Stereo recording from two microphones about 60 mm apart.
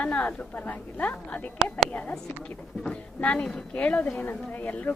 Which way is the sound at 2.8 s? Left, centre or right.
Left.